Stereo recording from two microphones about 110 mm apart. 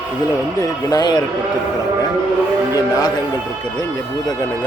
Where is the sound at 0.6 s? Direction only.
35° left (ahead or behind).